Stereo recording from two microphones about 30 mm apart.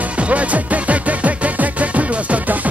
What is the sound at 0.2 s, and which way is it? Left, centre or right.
Music, right.